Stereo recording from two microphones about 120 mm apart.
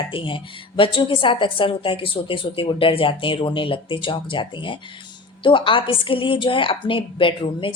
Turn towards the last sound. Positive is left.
turn(degrees=45)  # may be behind; listen again after turning